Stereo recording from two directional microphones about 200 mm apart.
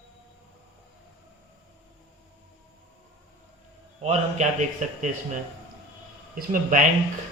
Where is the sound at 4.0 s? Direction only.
35° right (ahead or behind).